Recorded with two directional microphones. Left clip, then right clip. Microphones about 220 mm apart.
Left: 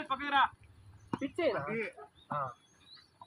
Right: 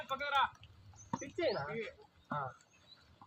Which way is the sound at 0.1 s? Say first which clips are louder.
Left 4 dB; 25° left (ahead or behind).